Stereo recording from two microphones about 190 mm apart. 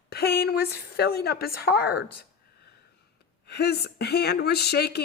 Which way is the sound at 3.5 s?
60° left (ahead or behind).